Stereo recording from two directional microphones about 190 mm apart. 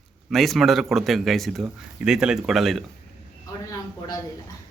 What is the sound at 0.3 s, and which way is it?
Speech, centre (ahead or behind).